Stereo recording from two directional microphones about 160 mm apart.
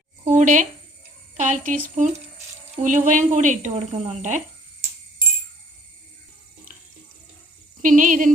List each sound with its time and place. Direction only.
0.3 s a woman's voice: 50° right (ahead or behind)
2.8 s a woman's voice: 50° right (ahead or behind)
7.8 s speech: 55° right (ahead or behind)